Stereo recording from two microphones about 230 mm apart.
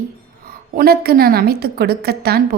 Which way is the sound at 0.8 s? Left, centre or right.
Right.